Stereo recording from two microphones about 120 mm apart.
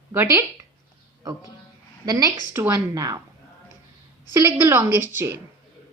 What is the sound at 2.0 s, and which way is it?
A woman's voice, 30° right (ahead or behind).